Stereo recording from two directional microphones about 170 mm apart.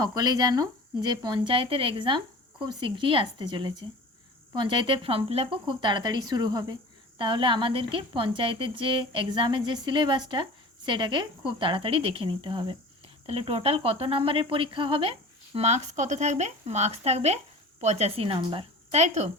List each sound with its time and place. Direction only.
0.0 s speech: 25° right (ahead or behind); by 19.3 s 40° right (ahead or behind)